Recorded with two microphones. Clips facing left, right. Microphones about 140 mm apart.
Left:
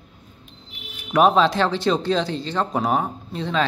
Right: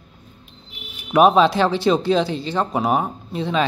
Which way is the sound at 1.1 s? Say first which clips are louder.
Right 3 dB; 10° right (ahead or behind).